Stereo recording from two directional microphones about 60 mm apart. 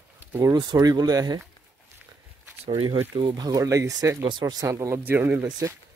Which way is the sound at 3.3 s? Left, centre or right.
Right.